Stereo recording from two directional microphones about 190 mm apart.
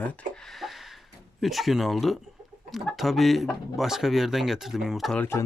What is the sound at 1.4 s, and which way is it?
Speech, centre (ahead or behind).